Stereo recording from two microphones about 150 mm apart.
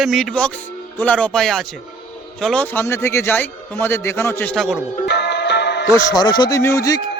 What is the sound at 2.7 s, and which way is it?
A man's voice, 15° left (ahead or behind).